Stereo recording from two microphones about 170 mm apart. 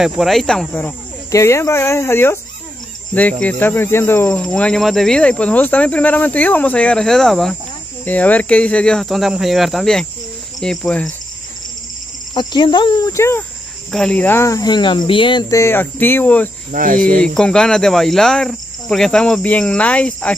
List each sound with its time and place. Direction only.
0.0 s speech: centre (ahead or behind)
12.4 s speech: 25° left (ahead or behind)
15.6 s speech: 10° left (ahead or behind)
16.7 s speech: 50° right (ahead or behind)
17.2 s speech: 5° left (ahead or behind)